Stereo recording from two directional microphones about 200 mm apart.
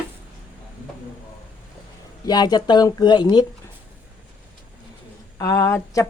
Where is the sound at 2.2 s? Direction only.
20° left (ahead or behind).